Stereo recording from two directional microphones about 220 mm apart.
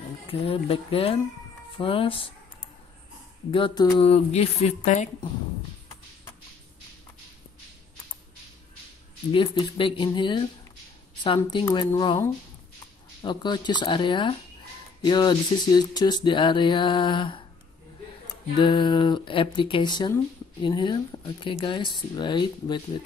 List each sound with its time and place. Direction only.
0.3 s speech: 25° left (ahead or behind)
3.5 s speech: 20° left (ahead or behind)
9.3 s speech: 25° left (ahead or behind)
18.6 s speech: 20° left (ahead or behind)